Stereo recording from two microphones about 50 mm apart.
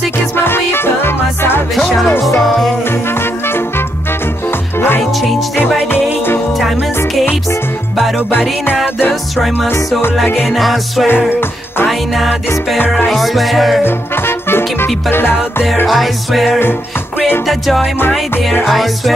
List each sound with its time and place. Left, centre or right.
0.4 s music: left
2.4 s music: centre
3.2 s music: left
4.7 s music: left
8.3 s music: left
10.2 s music: left
10.5 s music: centre
13.1 s music: centre
13.8 s music: left
15.9 s music: centre